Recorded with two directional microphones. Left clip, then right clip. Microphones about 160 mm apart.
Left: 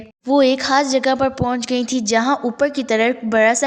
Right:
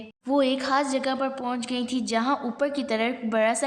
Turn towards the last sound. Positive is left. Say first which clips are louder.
# left 9 dB
turn(degrees=35)  # may be behind; listen again after turning